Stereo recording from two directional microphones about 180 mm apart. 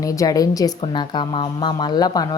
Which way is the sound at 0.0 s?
20° left (ahead or behind).